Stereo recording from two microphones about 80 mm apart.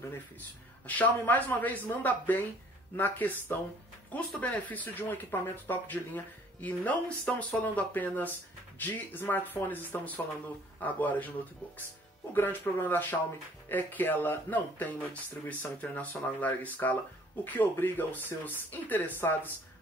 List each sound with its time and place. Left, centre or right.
0.8 s speech: left
12.3 s speech: left